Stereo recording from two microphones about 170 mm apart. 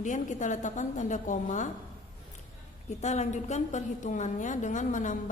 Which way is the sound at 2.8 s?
40° left (ahead or behind).